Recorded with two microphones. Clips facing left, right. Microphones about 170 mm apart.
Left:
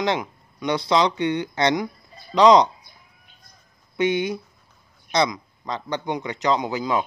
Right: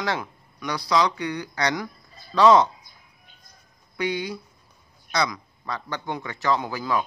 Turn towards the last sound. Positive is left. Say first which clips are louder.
# left 2 dB
turn(degrees=20)  # may be behind; listen again after turning